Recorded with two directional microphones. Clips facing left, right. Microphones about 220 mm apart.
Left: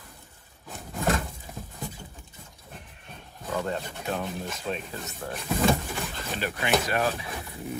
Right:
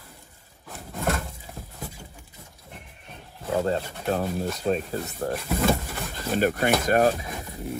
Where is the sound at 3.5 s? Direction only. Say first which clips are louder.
Right 5 dB; 30° right (ahead or behind).